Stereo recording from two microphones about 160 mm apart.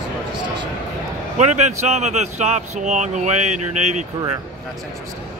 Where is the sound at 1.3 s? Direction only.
45° right (ahead or behind).